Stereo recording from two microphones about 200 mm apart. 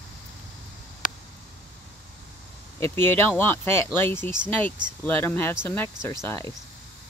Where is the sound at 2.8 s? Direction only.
10° left (ahead or behind).